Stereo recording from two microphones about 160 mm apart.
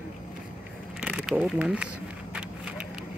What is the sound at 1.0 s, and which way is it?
Speech, 5° right (ahead or behind).